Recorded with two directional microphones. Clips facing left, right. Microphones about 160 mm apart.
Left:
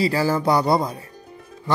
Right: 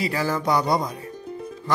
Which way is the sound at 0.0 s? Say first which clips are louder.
Left 4 dB; 30° left (ahead or behind).